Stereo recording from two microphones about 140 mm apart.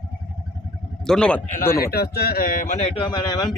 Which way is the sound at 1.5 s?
80° left.